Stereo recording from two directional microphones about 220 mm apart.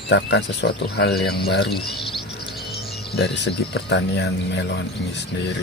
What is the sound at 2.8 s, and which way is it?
Speech, 50° left (ahead or behind).